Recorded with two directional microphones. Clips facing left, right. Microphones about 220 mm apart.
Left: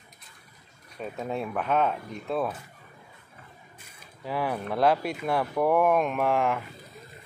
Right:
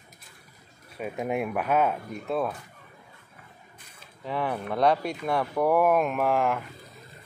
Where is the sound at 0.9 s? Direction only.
10° right (ahead or behind).